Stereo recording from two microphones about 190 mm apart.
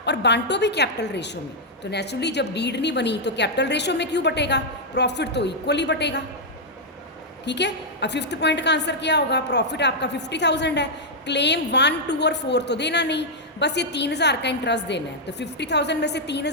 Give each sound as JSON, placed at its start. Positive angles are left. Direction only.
{"t": 0.0, "sound": "a woman's voice", "side_deg": 65}
{"t": 7.4, "sound": "a woman's voice", "side_deg": 65}